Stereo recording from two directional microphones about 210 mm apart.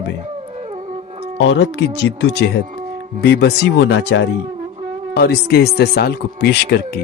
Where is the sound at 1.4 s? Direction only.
55° left (ahead or behind).